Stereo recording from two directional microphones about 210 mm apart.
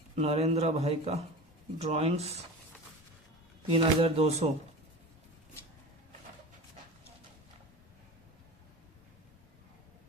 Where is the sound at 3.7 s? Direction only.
25° right (ahead or behind).